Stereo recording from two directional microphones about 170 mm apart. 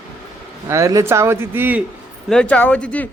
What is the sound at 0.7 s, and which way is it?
Speech, 20° right (ahead or behind).